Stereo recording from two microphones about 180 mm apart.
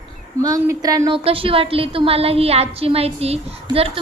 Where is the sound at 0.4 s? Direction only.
20° right (ahead or behind).